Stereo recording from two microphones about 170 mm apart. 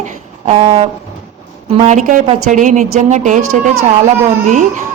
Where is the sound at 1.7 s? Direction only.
45° right (ahead or behind).